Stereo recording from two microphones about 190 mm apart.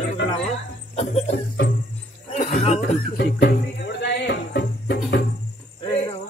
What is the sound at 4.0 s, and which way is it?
Music, 65° left (ahead or behind).